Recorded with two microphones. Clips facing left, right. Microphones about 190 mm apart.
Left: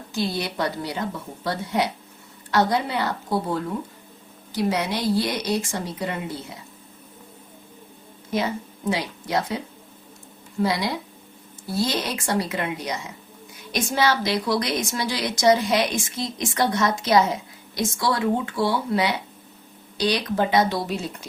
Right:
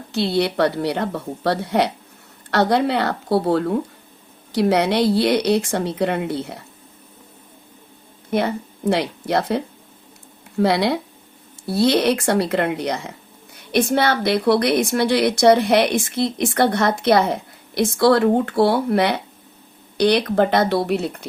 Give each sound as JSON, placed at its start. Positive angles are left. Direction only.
{"t": 0.1, "sound": "speech", "side_deg": -65}
{"t": 8.3, "sound": "a woman's voice", "side_deg": -60}